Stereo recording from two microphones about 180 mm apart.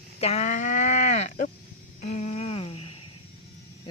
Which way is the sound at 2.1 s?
40° left (ahead or behind).